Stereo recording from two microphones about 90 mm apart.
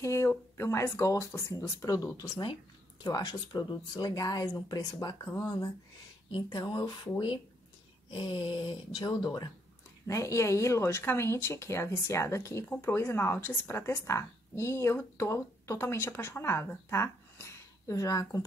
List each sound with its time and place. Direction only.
0.0 s speech: 30° left (ahead or behind)
6.3 s speech: 55° left (ahead or behind)
8.1 s speech: 60° left (ahead or behind)
10.0 s speech: 35° left (ahead or behind)